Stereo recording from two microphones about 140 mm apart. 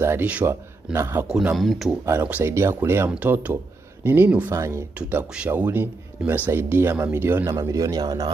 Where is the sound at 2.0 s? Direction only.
15° right (ahead or behind).